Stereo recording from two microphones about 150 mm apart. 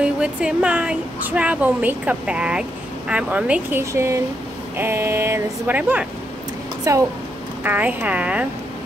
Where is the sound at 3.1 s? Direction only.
10° right (ahead or behind).